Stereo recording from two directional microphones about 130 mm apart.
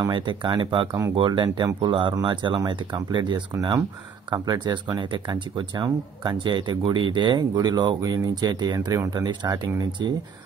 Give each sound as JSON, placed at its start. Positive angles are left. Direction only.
{"t": 0.0, "sound": "speech", "side_deg": -40}